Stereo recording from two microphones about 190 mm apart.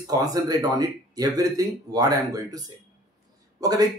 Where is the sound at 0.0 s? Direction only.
20° right (ahead or behind).